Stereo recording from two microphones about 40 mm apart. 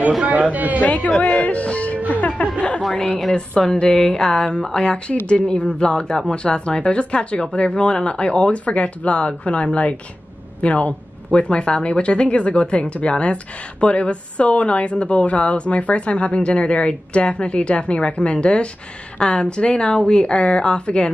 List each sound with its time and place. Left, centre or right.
0.2 s speech: right
0.7 s speech: left
2.0 s music: right
3.3 s speech: left